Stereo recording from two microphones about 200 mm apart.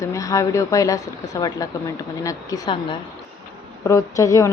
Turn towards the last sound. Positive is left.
turn(degrees=15)  # may be behind; listen again after turning